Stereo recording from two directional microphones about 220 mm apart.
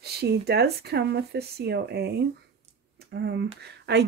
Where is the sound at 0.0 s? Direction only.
45° right (ahead or behind).